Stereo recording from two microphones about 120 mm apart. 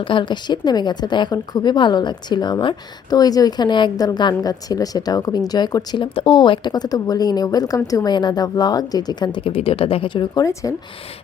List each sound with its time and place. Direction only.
0.0 s speech: 45° left (ahead or behind)
10.4 s speech: 25° left (ahead or behind)